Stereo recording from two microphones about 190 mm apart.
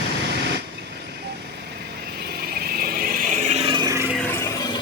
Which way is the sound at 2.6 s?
55° right (ahead or behind).